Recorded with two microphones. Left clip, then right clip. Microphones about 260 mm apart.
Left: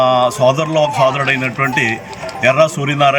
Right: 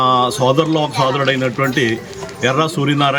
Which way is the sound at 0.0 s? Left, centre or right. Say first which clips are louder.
Left 2 dB; centre.